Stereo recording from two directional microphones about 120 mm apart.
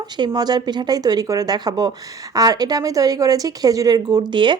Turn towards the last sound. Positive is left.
turn(degrees=-40)  # may be behind; listen again after turning